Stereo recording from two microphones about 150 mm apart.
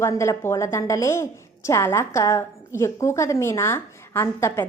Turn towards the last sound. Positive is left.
turn(degrees=15)  # may be behind; listen again after turning